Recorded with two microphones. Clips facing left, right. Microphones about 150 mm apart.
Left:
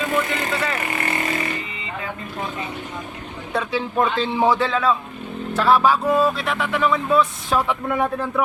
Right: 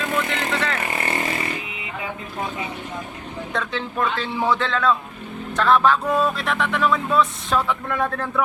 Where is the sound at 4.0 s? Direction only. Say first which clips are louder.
Left 4 dB; 20° left (ahead or behind); by 7.6 s 5° left (ahead or behind).